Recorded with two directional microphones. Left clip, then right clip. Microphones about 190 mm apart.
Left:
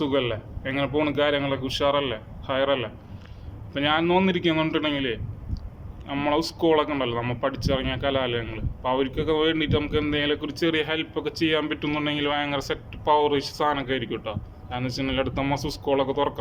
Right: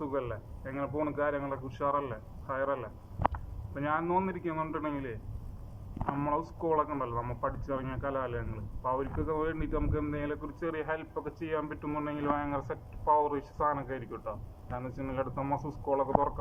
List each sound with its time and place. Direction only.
0.0 s speech: 20° left (ahead or behind)